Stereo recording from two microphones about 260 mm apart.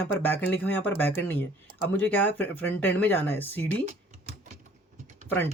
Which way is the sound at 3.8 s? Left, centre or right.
Right.